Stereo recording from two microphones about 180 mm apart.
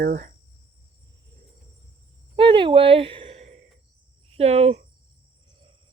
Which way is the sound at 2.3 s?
25° right (ahead or behind).